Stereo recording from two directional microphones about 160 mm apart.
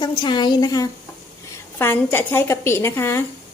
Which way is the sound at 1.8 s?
15° left (ahead or behind).